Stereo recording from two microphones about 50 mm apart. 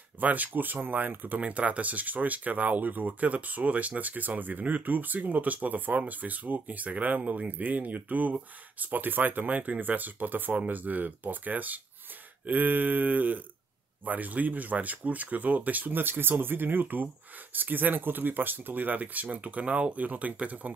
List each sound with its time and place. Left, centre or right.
0.2 s speech: right
1.4 s speech: right